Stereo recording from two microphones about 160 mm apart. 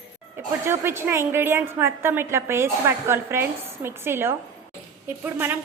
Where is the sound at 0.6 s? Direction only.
15° right (ahead or behind).